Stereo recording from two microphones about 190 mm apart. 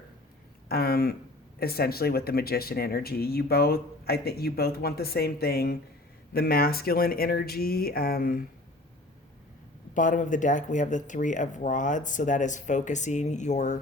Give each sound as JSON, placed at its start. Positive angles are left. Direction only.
{"t": 0.7, "sound": "speech", "side_deg": 55}
{"t": 9.9, "sound": "speech", "side_deg": 40}